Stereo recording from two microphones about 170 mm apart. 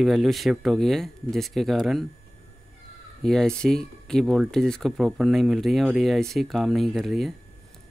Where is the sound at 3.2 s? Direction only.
5° left (ahead or behind).